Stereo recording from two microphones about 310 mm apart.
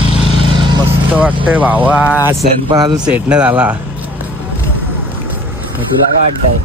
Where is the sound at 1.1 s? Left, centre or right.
Centre.